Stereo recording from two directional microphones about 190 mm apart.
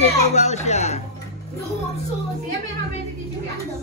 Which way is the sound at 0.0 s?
35° left (ahead or behind).